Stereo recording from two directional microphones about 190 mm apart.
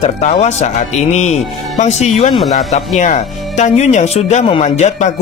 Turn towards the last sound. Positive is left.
turn(degrees=35)  # may be behind; listen again after turning